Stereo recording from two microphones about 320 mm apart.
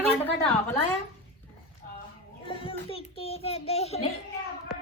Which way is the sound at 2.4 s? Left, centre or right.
Centre.